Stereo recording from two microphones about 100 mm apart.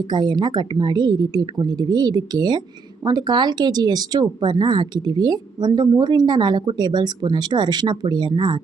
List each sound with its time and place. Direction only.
0.1 s speech: 45° right (ahead or behind)